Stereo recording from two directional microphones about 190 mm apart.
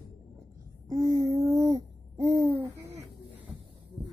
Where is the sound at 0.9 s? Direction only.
20° right (ahead or behind).